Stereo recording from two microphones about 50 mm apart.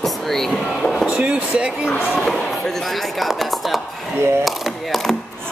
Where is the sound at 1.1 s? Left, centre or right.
Right.